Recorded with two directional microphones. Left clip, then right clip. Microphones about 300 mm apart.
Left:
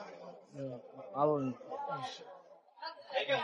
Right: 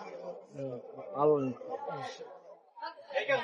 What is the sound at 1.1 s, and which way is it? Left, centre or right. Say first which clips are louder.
Speech: right 4 dB; left.